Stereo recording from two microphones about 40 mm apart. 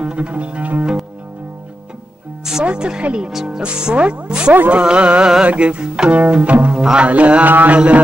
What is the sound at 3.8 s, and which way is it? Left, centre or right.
Music, right.